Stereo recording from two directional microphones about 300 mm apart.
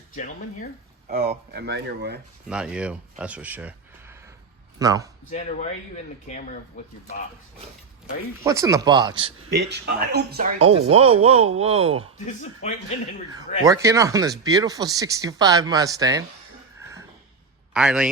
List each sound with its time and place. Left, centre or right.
0.1 s speech: left
1.0 s speech: right
1.5 s speech: right
2.5 s speech: centre
5.3 s speech: left
8.4 s speech: centre
9.5 s speech: right
10.6 s speech: centre
12.2 s speech: left
13.7 s speech: centre
17.7 s a man's voice: centre